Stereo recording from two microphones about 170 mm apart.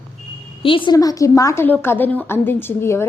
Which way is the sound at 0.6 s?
30° left (ahead or behind).